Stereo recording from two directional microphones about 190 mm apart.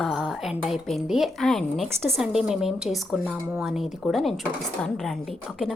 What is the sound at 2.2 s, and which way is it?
A woman's voice, 5° right (ahead or behind).